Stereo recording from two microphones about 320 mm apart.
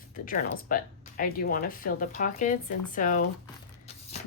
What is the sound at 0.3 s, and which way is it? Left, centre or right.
Speech, left.